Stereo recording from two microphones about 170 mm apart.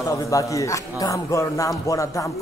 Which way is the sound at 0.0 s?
20° left (ahead or behind).